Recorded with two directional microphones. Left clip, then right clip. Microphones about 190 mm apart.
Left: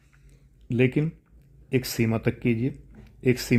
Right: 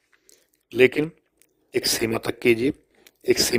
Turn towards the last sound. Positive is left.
turn(degrees=-35)  # may be behind; listen again after turning